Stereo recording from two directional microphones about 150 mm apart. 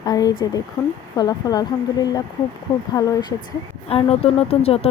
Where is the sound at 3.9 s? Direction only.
40° left (ahead or behind).